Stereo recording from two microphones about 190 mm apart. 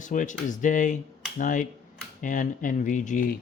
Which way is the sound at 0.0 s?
40° left (ahead or behind).